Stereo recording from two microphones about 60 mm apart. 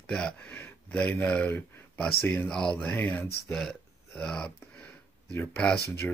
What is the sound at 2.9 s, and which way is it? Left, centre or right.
Speech, left.